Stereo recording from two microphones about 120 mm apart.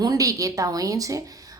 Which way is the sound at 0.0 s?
30° right (ahead or behind).